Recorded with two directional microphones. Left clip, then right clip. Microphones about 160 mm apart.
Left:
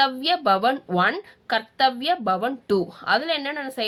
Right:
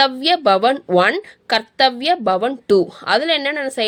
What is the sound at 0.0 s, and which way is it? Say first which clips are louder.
A woman's voice: right 6 dB; 50° right (ahead or behind).